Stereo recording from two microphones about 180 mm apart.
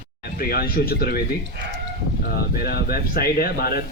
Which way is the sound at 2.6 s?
55° left (ahead or behind).